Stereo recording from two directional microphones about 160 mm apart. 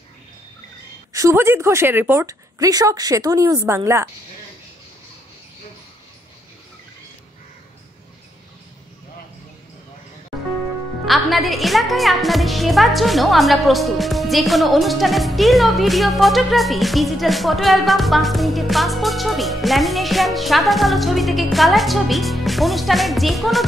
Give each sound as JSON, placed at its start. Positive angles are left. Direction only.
{"t": 1.1, "sound": "a woman's voice", "side_deg": -15}
{"t": 11.1, "sound": "a woman's voice", "side_deg": 0}